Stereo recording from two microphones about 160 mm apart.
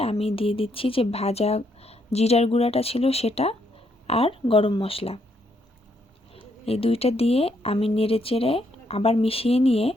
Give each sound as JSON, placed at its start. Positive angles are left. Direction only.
{"t": 0.0, "sound": "speech", "side_deg": 40}
{"t": 6.3, "sound": "speech", "side_deg": 35}